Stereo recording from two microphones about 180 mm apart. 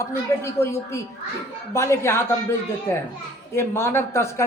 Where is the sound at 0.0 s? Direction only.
15° left (ahead or behind).